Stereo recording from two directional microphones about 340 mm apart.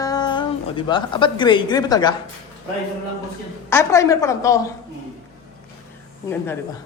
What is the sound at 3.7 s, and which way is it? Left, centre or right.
Speech, centre.